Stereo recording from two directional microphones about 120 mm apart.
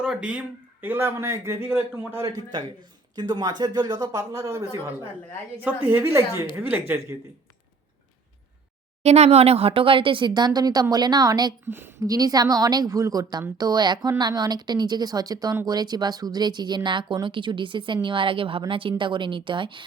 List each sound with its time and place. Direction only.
0.0 s speech: 5° right (ahead or behind)
2.2 s speech: 35° right (ahead or behind)
5.6 s a woman's voice: 15° right (ahead or behind)
9.0 s speech: 60° right (ahead or behind); by 11.5 s 35° right (ahead or behind)
11.6 s a woman's voice: 20° right (ahead or behind)
12.0 s a woman's voice: 30° right (ahead or behind)